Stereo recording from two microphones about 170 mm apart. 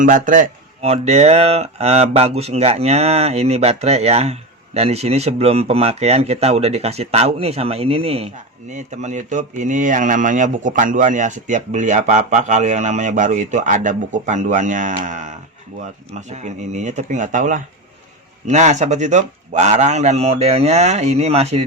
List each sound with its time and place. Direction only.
0.0 s speech: 50° right (ahead or behind)
0.8 s speech: 40° right (ahead or behind)